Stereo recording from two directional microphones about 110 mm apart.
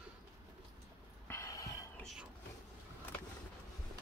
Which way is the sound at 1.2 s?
25° left (ahead or behind).